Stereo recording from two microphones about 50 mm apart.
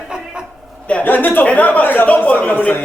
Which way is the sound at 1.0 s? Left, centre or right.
Left.